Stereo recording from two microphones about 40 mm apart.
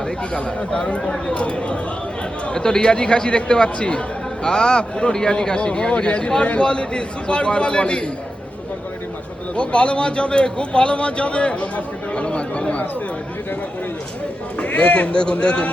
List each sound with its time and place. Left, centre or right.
0.3 s a man's voice: left
9.6 s a man's voice: left
14.6 s a man's voice: left